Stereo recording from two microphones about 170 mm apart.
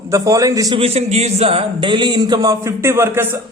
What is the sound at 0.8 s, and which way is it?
A man's voice, 35° right (ahead or behind).